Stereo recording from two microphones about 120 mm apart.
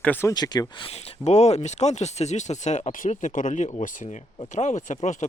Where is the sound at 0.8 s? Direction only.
65° left (ahead or behind).